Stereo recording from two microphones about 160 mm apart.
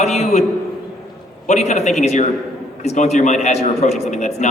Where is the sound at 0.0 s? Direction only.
45° left (ahead or behind).